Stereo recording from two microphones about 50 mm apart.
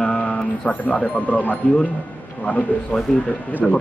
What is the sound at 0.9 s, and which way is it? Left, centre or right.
Speech, left.